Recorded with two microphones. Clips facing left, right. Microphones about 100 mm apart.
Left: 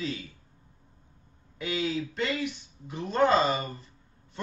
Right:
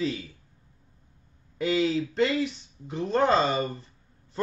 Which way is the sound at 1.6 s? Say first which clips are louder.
Right 6 dB; 30° right (ahead or behind).